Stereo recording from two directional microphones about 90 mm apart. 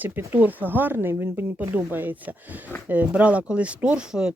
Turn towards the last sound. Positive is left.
turn(degrees=-10)  # may be behind; listen again after turning